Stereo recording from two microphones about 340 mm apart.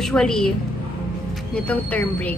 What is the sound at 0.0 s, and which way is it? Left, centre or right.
Speech, centre.